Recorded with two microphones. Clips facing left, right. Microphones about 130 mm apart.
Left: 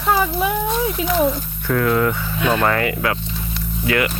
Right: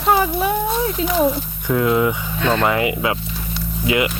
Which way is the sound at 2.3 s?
10° left (ahead or behind).